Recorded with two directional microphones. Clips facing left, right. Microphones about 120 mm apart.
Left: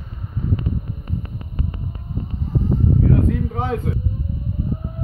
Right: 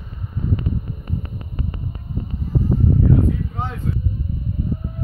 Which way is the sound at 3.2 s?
90° left.